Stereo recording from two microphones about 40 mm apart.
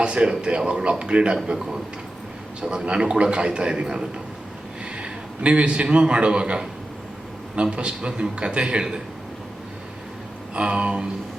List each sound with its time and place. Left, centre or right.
0.0 s a man's voice: right
10.5 s a man's voice: right